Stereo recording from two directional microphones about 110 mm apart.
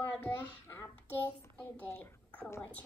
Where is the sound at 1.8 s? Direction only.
20° left (ahead or behind).